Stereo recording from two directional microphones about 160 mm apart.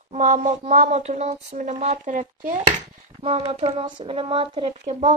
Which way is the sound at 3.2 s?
35° right (ahead or behind).